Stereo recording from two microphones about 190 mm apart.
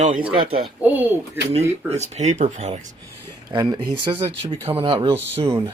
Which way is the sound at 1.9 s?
35° right (ahead or behind).